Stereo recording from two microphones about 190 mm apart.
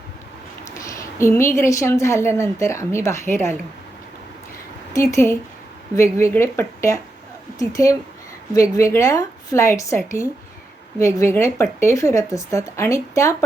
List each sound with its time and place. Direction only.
0.6 s a woman's voice: 15° left (ahead or behind)
4.9 s speech: 15° left (ahead or behind)